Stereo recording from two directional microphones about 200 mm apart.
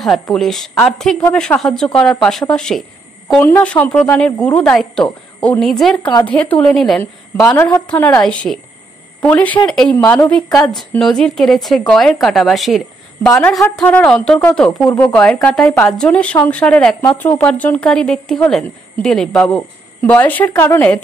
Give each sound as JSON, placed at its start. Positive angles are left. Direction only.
{"t": 0.0, "sound": "a woman's voice", "side_deg": 0}
{"t": 7.4, "sound": "a woman's voice", "side_deg": 15}
{"t": 10.8, "sound": "a woman's voice", "side_deg": 0}
{"t": 13.3, "sound": "a woman's voice", "side_deg": 15}